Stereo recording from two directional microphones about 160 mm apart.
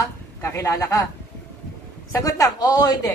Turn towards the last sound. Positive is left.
turn(degrees=25)  # may be behind; listen again after turning